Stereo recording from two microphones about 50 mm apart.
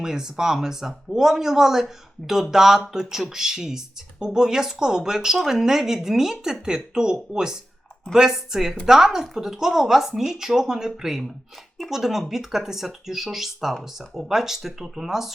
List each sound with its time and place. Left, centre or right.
0.0 s speech: centre